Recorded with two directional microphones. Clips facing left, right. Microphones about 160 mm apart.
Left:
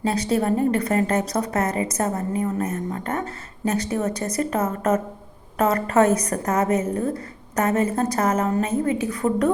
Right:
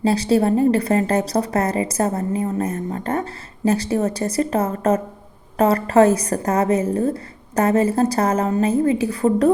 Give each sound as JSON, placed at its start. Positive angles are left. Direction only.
{"t": 0.0, "sound": "speech", "side_deg": -30}